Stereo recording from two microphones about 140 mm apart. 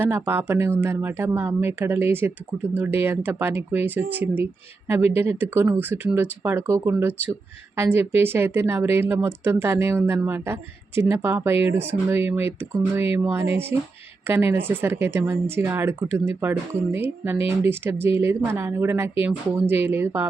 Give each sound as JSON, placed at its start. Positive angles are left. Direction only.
{"t": 0.0, "sound": "speech", "side_deg": -15}